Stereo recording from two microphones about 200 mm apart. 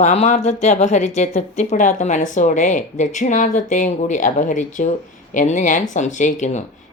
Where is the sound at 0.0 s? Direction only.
35° left (ahead or behind).